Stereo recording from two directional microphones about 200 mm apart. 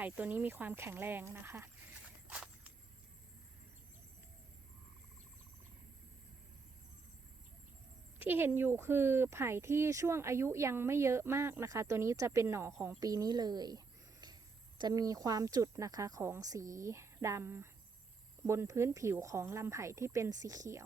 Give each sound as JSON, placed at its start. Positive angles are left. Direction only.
{"t": 0.0, "sound": "speech", "side_deg": -10}
{"t": 2.2, "sound": "walk", "side_deg": -5}
{"t": 8.2, "sound": "speech", "side_deg": -10}